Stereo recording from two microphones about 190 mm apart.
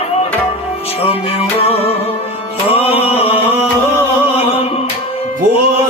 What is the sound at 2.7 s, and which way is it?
Chant, 30° left (ahead or behind).